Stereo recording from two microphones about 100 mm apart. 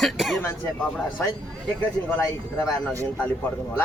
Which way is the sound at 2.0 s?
15° left (ahead or behind).